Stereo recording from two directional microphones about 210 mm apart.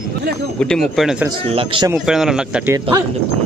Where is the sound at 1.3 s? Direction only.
25° right (ahead or behind).